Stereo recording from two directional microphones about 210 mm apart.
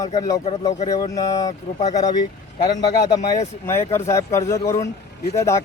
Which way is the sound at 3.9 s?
15° left (ahead or behind).